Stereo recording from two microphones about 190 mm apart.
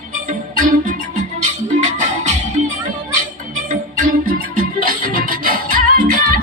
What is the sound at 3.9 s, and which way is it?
Music, 45° right (ahead or behind).